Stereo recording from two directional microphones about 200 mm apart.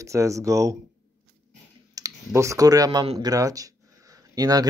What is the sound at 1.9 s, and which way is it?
Speech, 15° right (ahead or behind).